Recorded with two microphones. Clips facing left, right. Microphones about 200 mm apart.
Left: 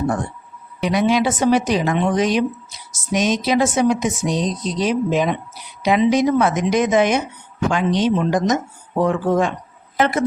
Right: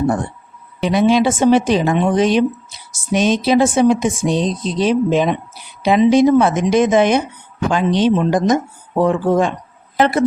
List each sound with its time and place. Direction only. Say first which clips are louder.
0.8 s speech: right 4 dB; 30° right (ahead or behind)